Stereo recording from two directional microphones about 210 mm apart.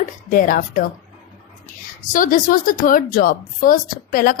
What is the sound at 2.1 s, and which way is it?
A woman's voice, 40° left (ahead or behind).